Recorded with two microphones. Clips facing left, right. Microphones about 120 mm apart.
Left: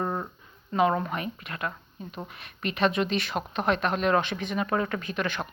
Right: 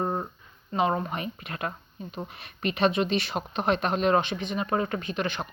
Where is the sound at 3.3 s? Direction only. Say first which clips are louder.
Even; 30° right (ahead or behind).